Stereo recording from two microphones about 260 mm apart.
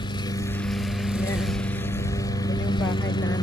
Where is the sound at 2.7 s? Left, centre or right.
Centre.